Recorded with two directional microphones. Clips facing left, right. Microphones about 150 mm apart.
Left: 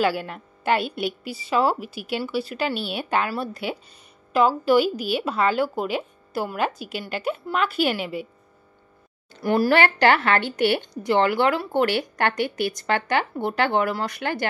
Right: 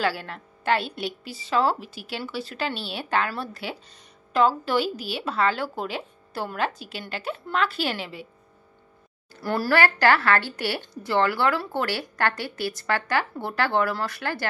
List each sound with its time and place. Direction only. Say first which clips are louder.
0.0 s a woman's voice: left 4 dB; 15° left (ahead or behind)
9.3 s speech: left 4 dB; 15° left (ahead or behind)